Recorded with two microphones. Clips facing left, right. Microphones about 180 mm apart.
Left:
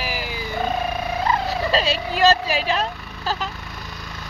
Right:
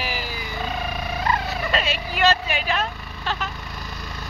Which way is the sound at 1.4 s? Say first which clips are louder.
Left 4 dB; 30° left (ahead or behind).